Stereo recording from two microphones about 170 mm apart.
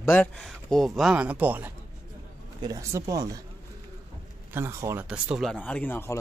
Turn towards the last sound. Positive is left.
turn(degrees=10)  # may be behind; listen again after turning